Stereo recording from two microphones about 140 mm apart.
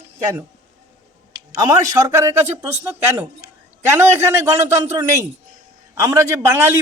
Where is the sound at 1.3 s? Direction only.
25° right (ahead or behind).